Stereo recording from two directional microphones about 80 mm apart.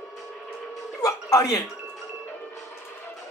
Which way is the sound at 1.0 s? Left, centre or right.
Left.